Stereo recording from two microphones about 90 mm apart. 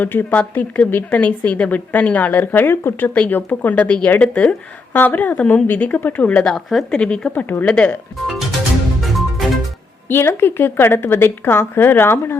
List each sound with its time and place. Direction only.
0.0 s speech: 25° left (ahead or behind)
6.5 s speech: centre (ahead or behind)
9.0 s music: centre (ahead or behind)
10.1 s a woman's voice: 25° left (ahead or behind)